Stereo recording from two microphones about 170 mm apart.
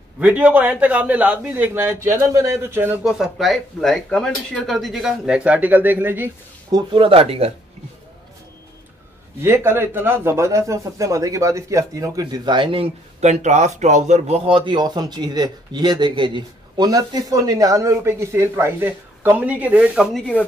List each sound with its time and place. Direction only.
0.2 s a man's voice: 10° right (ahead or behind)
6.7 s speech: 30° right (ahead or behind)
9.4 s speech: 15° right (ahead or behind); by 20.4 s 5° left (ahead or behind)